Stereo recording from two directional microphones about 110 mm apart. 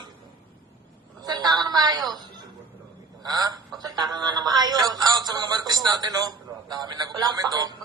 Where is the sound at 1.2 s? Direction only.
40° right (ahead or behind).